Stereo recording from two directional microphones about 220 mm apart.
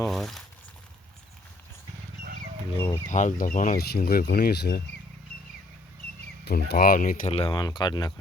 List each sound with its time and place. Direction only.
0.0 s speech: centre (ahead or behind)
2.7 s speech: 15° left (ahead or behind)
3.1 s speech: 35° left (ahead or behind)
6.4 s speech: 45° left (ahead or behind); by 8.1 s 20° left (ahead or behind)